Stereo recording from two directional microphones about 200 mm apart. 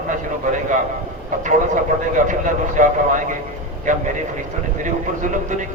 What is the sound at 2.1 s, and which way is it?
Speech, 40° right (ahead or behind).